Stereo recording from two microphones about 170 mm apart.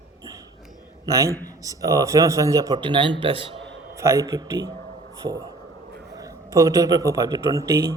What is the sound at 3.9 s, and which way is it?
A man's voice, 15° right (ahead or behind).